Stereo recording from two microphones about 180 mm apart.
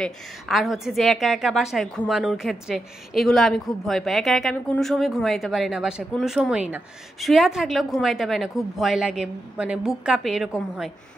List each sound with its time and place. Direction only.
0.0 s a woman's voice: centre (ahead or behind)